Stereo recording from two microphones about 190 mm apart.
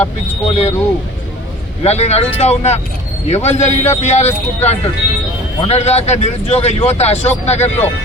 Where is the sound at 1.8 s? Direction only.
35° left (ahead or behind).